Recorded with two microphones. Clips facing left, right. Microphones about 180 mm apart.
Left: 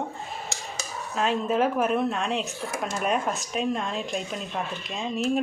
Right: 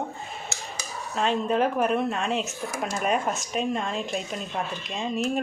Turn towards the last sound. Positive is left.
turn(degrees=0)  # may be behind; listen again after turning